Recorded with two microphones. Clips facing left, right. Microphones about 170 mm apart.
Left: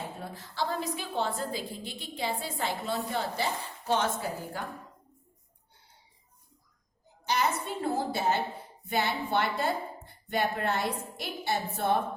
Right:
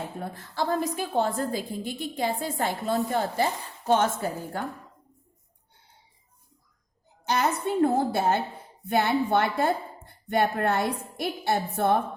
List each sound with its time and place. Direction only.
0.2 s a woman's voice: 50° right (ahead or behind)
7.3 s a woman's voice: 55° right (ahead or behind)